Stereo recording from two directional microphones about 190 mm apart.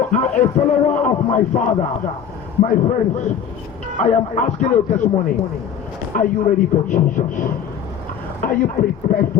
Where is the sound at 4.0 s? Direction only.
35° left (ahead or behind).